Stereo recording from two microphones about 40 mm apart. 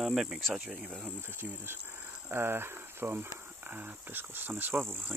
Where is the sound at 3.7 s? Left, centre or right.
Right.